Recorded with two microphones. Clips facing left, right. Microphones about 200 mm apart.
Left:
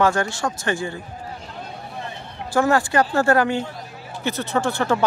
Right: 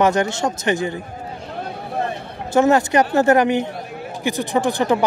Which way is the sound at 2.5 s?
20° right (ahead or behind).